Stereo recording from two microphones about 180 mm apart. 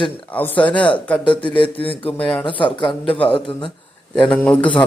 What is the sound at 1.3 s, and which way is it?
Speech, 30° left (ahead or behind).